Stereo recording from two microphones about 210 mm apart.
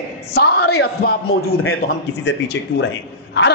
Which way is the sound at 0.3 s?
50° left (ahead or behind).